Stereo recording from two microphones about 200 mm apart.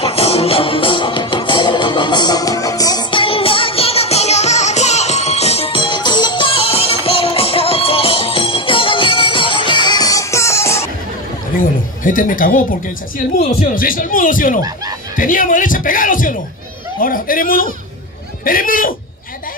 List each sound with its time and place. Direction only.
0.0 s music: 30° left (ahead or behind); by 10.9 s 15° left (ahead or behind)
11.5 s a sound: 45° left (ahead or behind)
13.6 s speech: 45° left (ahead or behind)